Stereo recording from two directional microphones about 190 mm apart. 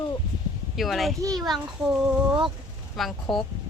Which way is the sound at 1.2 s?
20° right (ahead or behind).